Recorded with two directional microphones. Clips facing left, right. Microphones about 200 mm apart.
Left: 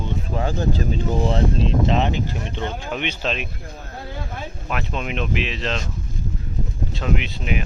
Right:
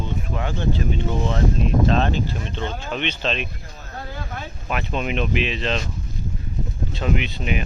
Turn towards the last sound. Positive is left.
turn(degrees=0)  # may be behind; listen again after turning